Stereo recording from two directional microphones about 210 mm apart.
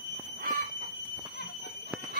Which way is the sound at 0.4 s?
40° right (ahead or behind).